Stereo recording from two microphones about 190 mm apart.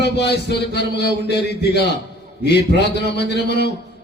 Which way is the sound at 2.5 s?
60° left (ahead or behind).